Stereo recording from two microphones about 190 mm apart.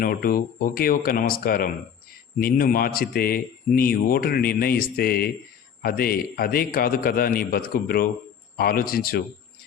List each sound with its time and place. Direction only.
0.0 s a man's voice: 50° left (ahead or behind)